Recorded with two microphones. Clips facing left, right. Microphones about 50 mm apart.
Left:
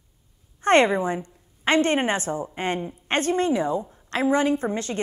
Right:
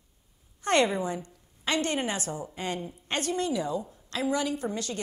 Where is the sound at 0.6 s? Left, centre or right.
Left.